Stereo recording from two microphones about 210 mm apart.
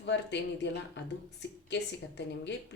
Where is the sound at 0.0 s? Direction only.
55° left (ahead or behind).